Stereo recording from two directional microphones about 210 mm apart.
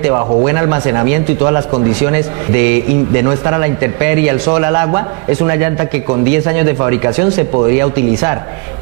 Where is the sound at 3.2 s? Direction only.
15° right (ahead or behind).